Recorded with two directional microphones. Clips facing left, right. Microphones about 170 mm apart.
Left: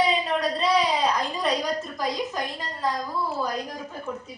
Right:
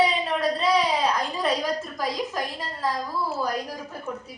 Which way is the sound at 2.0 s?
5° right (ahead or behind).